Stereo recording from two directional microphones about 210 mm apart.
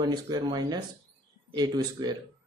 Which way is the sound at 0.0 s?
20° right (ahead or behind).